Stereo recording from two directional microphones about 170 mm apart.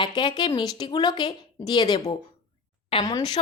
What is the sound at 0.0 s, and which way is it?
A woman's voice, 25° left (ahead or behind).